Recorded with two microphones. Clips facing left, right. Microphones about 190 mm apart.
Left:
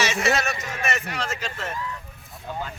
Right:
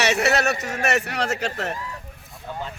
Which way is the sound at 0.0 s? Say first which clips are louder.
Right 3 dB; 65° right (ahead or behind).